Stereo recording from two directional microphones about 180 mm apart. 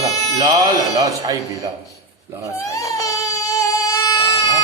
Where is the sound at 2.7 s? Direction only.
15° left (ahead or behind).